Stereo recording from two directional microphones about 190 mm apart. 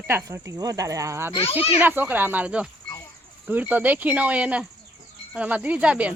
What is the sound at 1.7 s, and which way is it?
Speech, 10° right (ahead or behind).